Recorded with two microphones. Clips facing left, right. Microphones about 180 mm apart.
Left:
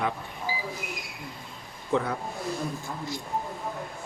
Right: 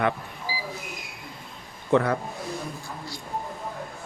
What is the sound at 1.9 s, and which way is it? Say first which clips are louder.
Speech: right 5 dB; 65° right (ahead or behind).